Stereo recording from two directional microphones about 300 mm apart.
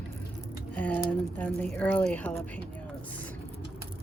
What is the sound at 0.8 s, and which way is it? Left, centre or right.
Speech, centre.